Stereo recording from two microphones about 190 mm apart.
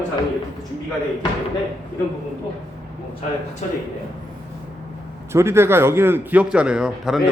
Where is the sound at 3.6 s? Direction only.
40° left (ahead or behind).